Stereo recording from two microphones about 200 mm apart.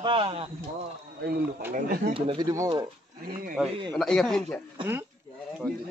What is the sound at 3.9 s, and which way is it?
Speech, 5° left (ahead or behind).